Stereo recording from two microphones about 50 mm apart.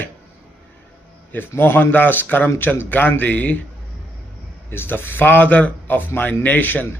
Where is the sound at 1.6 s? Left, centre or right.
Left.